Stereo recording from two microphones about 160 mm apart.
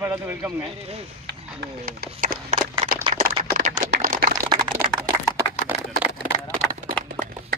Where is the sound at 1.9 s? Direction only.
65° right (ahead or behind).